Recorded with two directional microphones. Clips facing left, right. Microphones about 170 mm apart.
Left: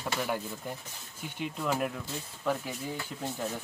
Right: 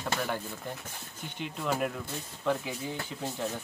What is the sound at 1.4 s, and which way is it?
Speech, centre (ahead or behind).